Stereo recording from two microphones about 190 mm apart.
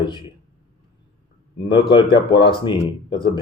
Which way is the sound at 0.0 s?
25° left (ahead or behind).